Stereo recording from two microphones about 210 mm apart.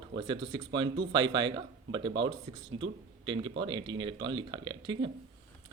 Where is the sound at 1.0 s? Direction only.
20° right (ahead or behind).